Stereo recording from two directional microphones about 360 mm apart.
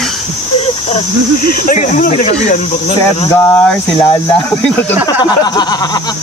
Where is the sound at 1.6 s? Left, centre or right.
Left.